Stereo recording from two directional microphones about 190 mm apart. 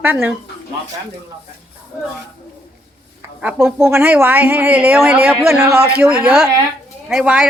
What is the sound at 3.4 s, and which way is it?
A woman's voice, 10° right (ahead or behind).